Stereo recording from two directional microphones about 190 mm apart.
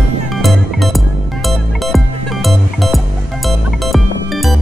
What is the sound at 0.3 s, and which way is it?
Music, centre (ahead or behind).